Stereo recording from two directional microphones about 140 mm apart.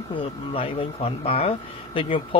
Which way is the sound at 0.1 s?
40° left (ahead or behind).